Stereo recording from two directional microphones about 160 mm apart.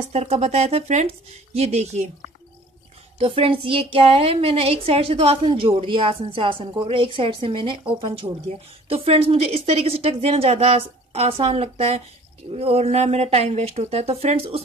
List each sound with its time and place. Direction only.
0.1 s a woman's voice: 40° right (ahead or behind)
3.2 s a woman's voice: 35° right (ahead or behind)